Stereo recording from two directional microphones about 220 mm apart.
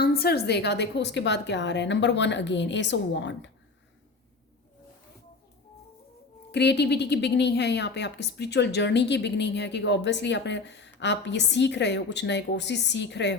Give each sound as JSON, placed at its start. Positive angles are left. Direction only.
{"t": 0.0, "sound": "a woman's voice", "side_deg": 45}
{"t": 6.5, "sound": "a woman's voice", "side_deg": 50}